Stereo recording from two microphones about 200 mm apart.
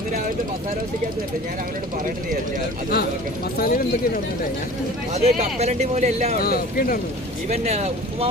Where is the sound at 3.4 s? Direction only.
50° left (ahead or behind).